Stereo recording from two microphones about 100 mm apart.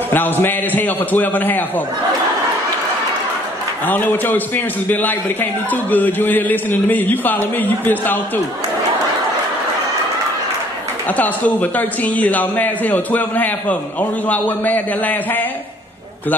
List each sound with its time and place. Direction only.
0.1 s a man's voice: 20° left (ahead or behind)
3.8 s a man's voice: 15° left (ahead or behind)
11.1 s a man's voice: 15° left (ahead or behind)